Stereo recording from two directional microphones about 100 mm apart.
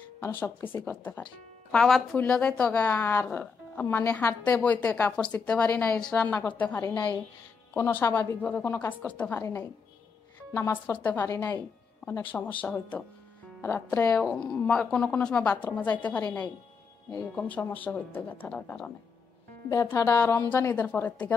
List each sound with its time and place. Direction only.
0.2 s speech: 20° left (ahead or behind)
3.8 s speech: 30° left (ahead or behind)
4.5 s speech: 15° left (ahead or behind)
6.9 s a woman's voice: 45° left (ahead or behind)
7.7 s speech: 25° left (ahead or behind)
9.3 s a woman's voice: 25° left (ahead or behind)
10.9 s speech: 15° left (ahead or behind)
17.4 s speech: 15° left (ahead or behind)
19.7 s speech: 30° left (ahead or behind)